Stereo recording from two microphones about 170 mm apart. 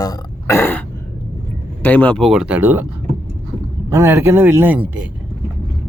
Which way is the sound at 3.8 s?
15° right (ahead or behind).